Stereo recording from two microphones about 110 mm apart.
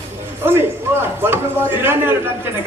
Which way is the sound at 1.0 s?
20° right (ahead or behind).